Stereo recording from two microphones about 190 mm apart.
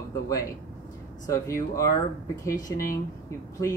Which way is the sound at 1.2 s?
15° left (ahead or behind).